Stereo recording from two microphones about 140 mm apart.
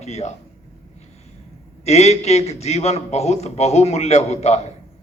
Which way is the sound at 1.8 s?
50° left (ahead or behind).